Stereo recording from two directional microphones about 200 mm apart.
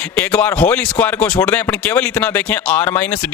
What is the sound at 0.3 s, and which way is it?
Speech, 10° left (ahead or behind).